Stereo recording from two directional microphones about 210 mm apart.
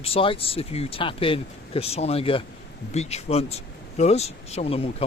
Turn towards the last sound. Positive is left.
turn(degrees=30)  # may be behind; listen again after turning